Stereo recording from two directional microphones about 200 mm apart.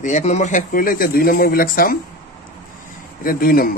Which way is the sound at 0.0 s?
35° left (ahead or behind).